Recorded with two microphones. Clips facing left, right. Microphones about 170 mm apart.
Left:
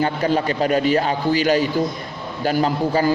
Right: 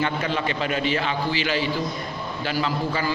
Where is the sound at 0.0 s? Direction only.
40° left (ahead or behind).